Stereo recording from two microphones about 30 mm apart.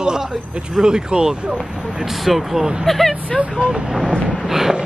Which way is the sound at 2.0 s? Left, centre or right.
Centre.